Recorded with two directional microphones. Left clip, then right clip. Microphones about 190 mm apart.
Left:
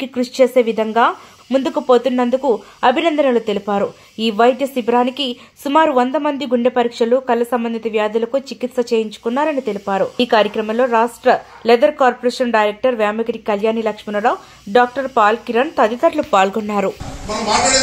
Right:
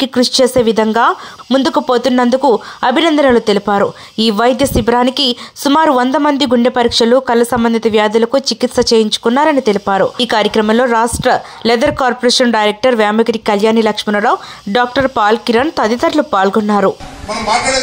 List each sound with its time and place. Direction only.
0.0 s speech: 25° right (ahead or behind)